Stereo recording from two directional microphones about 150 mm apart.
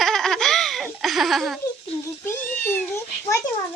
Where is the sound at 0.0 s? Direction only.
Centre (ahead or behind).